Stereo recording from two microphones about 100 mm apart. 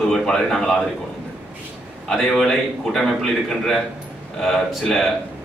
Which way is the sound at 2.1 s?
5° left (ahead or behind).